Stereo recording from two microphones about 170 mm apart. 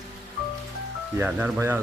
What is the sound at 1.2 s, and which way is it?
Speech, 10° right (ahead or behind).